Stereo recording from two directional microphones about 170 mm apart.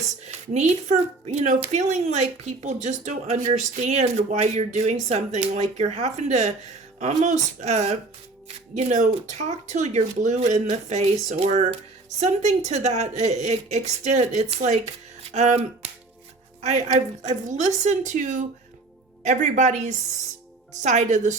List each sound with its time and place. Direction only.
0.3 s a woman's voice: 40° right (ahead or behind)